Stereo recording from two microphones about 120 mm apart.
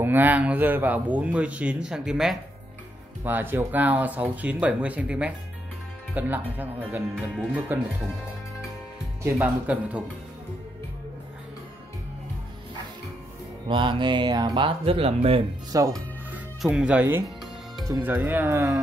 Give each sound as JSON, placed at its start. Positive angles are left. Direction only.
{"t": 0.0, "sound": "a man's voice", "side_deg": -15}
{"t": 3.3, "sound": "a man's voice", "side_deg": -15}
{"t": 9.2, "sound": "a man's voice", "side_deg": -15}
{"t": 13.7, "sound": "speech", "side_deg": -40}
{"t": 15.7, "sound": "speech", "side_deg": -30}
{"t": 16.6, "sound": "a man's voice", "side_deg": -5}